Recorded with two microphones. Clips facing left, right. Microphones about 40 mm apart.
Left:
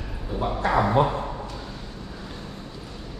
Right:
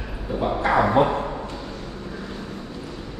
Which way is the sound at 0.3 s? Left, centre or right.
Centre.